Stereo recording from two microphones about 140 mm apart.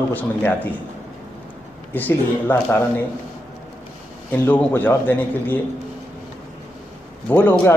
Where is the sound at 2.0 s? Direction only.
15° left (ahead or behind).